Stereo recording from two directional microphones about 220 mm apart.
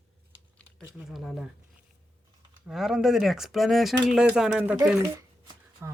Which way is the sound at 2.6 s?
Centre (ahead or behind).